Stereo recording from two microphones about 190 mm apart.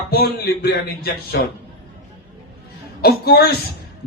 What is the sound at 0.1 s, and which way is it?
Speech, 55° left (ahead or behind).